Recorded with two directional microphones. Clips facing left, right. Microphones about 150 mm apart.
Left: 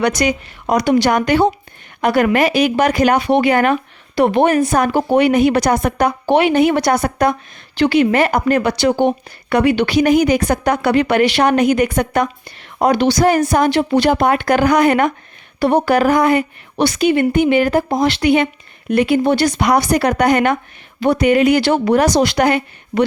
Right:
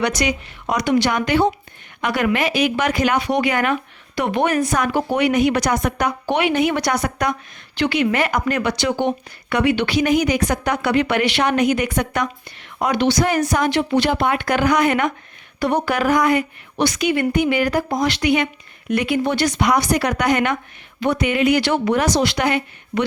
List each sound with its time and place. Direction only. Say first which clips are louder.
0.2 s a woman's voice: left 4 dB; 40° left (ahead or behind)